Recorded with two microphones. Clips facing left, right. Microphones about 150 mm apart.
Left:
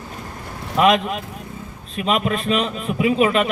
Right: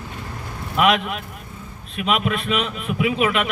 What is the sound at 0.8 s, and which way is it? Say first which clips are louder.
A man's voice: left 3 dB; 35° left (ahead or behind).